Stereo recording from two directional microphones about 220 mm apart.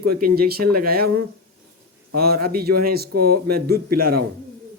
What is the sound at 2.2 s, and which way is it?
A man's voice, 45° right (ahead or behind).